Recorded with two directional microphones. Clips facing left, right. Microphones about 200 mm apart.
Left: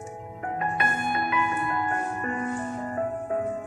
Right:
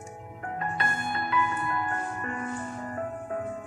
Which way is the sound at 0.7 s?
20° left (ahead or behind).